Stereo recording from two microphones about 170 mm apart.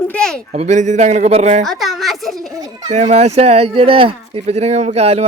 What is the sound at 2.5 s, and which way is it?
Children playing, 20° right (ahead or behind).